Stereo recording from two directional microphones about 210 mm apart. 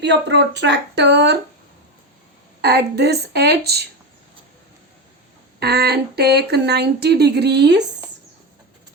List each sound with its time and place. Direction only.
0.0 s speech: 55° right (ahead or behind)
2.6 s speech: 50° right (ahead or behind)
5.5 s speech: 50° right (ahead or behind)